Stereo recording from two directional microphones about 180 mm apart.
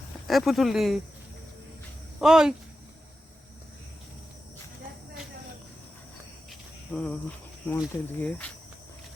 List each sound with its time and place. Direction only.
0.3 s speech: centre (ahead or behind)
2.2 s speech: 5° right (ahead or behind)
6.9 s speech: 5° left (ahead or behind)